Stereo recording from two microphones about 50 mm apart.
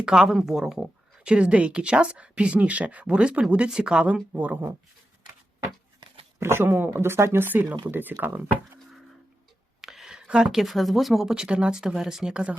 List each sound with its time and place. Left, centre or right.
0.0 s speech: centre
1.2 s speech: right
6.4 s speech: right
9.8 s speech: centre